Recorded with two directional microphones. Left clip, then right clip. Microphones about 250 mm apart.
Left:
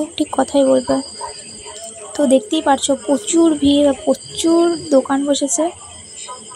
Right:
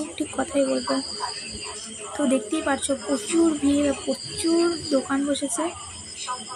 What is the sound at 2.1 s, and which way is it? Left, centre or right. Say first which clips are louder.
A woman's voice: left 10 dB; centre.